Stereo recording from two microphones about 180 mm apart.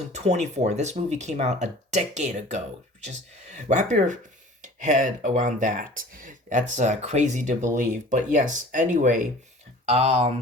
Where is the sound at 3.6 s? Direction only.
45° right (ahead or behind).